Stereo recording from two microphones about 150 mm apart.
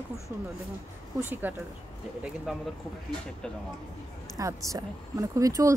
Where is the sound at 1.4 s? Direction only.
10° right (ahead or behind).